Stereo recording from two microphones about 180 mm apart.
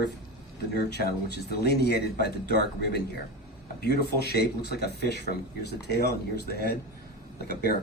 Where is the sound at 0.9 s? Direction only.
65° left (ahead or behind).